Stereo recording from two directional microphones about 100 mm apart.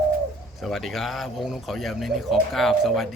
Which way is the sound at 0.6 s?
Centre (ahead or behind).